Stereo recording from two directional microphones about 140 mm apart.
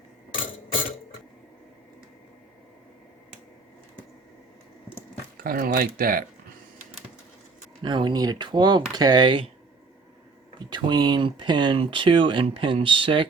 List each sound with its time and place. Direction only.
5.4 s speech: 90° right
7.8 s speech: 35° right (ahead or behind)
10.7 s speech: 30° right (ahead or behind)